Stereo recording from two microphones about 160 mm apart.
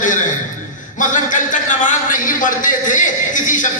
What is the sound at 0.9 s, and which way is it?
A man's voice, 50° left (ahead or behind).